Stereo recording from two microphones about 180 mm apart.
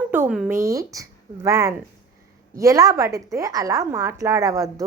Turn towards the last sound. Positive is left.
turn(degrees=-20)  # may be behind; listen again after turning